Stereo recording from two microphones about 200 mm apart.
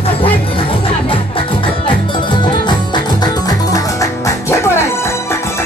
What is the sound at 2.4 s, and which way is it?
Music, 20° left (ahead or behind).